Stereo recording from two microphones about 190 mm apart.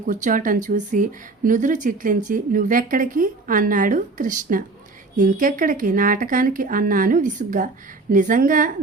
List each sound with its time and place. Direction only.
0.0 s speech: 45° right (ahead or behind)